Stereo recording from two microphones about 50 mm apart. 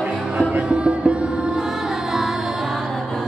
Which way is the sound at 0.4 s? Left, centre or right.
Right.